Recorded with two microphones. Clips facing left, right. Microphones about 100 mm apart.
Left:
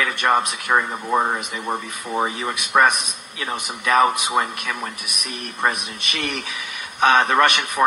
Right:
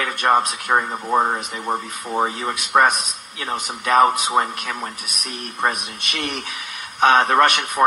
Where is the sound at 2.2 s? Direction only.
40° right (ahead or behind).